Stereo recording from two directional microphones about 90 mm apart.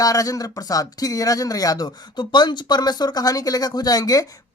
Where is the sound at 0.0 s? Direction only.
40° left (ahead or behind).